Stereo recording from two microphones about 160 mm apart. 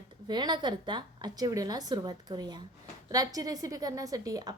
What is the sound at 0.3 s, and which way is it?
A woman's voice, 25° right (ahead or behind).